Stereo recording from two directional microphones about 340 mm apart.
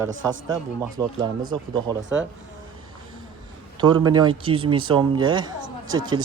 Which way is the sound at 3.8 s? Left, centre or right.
Centre.